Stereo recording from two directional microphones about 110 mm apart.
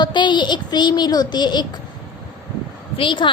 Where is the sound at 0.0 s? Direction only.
45° left (ahead or behind).